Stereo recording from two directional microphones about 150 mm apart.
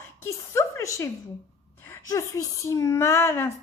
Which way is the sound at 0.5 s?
20° left (ahead or behind).